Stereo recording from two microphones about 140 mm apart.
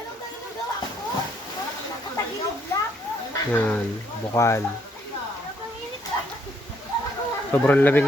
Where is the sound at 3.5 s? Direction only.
10° left (ahead or behind).